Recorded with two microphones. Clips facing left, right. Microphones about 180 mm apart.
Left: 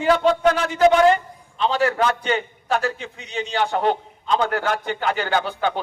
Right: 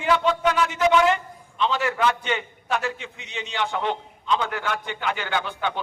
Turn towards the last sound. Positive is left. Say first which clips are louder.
# left 5 dB
turn(degrees=40)  # may be behind; listen again after turning